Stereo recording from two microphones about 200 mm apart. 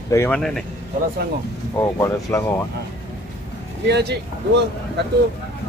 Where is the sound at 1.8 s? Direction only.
15° left (ahead or behind).